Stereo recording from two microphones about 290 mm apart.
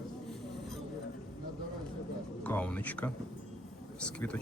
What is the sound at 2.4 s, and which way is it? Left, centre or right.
Speech, centre.